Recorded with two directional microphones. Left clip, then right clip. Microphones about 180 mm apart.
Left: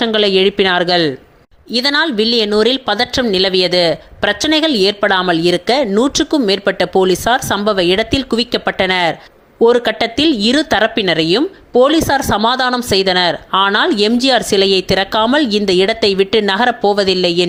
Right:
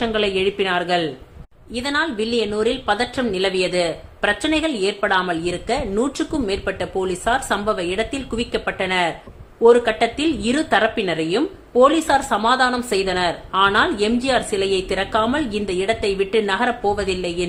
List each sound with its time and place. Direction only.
0.0 s speech: 40° left (ahead or behind)